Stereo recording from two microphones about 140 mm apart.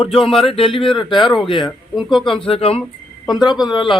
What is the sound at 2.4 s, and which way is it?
Speech, 40° left (ahead or behind).